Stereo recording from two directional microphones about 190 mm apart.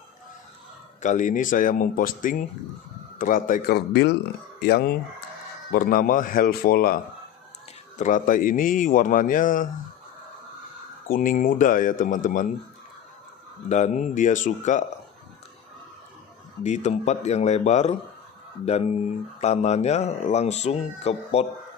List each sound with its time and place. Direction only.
1.0 s speech: 40° left (ahead or behind)
8.0 s speech: 45° left (ahead or behind)
11.1 s speech: 45° left (ahead or behind)
13.7 s speech: 40° left (ahead or behind)
16.6 s speech: 35° left (ahead or behind)